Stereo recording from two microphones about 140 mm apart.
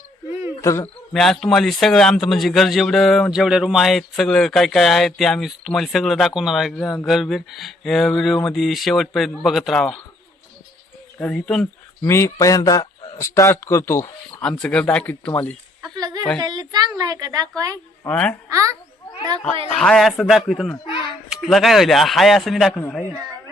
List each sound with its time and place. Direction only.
0.6 s speech: 20° left (ahead or behind)
1.1 s a man's voice: centre (ahead or behind)
11.2 s speech: 10° left (ahead or behind)
12.0 s speech: 20° left (ahead or behind)
14.4 s speech: 5° left (ahead or behind)
16.0 s a sound: 30° right (ahead or behind)
16.4 s a woman's voice: 30° right (ahead or behind)
18.0 s speech: 10° left (ahead or behind)
18.4 s a woman's voice: 25° right (ahead or behind)
19.7 s a man's voice: 5° left (ahead or behind)
22.8 s speech: 10° left (ahead or behind)